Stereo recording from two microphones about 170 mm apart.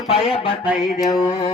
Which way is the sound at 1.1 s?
25° left (ahead or behind).